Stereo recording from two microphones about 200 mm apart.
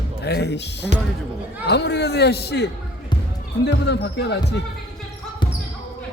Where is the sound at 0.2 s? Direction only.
55° left (ahead or behind).